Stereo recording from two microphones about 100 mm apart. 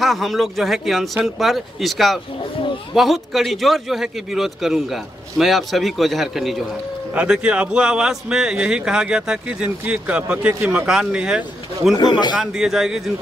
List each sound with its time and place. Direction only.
0.0 s a man's voice: centre (ahead or behind)
12.0 s a man's voice: 45° left (ahead or behind)
12.4 s a man's voice: 5° right (ahead or behind)